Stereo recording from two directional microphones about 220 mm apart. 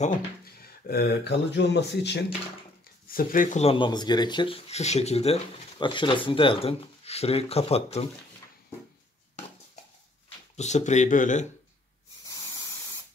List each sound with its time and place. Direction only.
0.6 s speech: 45° left (ahead or behind)
3.1 s speech: 40° left (ahead or behind)
10.5 s speech: 30° left (ahead or behind)
12.3 s spray: 15° left (ahead or behind)